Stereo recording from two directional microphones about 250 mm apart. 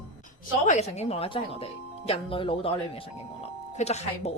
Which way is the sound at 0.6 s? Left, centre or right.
Left.